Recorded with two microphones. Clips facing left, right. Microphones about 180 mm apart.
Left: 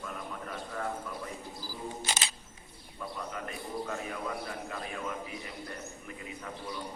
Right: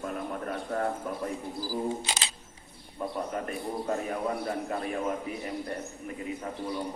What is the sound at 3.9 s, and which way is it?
A man's voice, 40° right (ahead or behind).